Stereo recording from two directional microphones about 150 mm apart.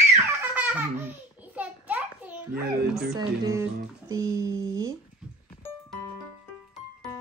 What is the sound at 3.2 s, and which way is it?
Speech, 25° right (ahead or behind).